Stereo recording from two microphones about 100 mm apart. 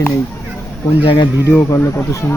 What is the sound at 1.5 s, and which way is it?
Speech, 25° left (ahead or behind).